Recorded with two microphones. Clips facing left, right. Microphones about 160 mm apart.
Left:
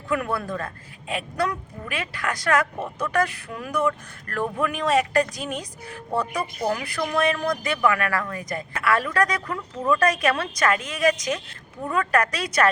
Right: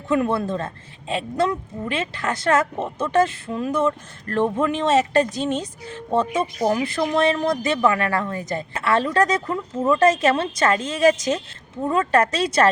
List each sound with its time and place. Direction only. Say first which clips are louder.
0.1 s a woman's voice: right 5 dB; 25° right (ahead or behind)